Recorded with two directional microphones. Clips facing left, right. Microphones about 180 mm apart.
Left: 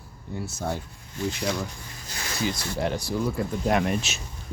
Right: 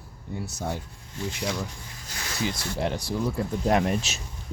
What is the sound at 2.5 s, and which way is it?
Speech, 25° right (ahead or behind).